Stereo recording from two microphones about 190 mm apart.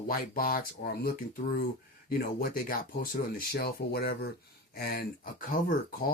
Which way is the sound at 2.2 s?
50° left (ahead or behind).